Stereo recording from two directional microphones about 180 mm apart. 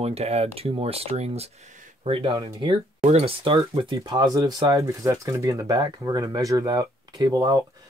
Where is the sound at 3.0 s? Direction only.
35° right (ahead or behind).